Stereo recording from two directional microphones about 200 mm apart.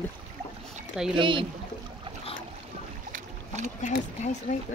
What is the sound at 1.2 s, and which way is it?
Speech, 25° right (ahead or behind).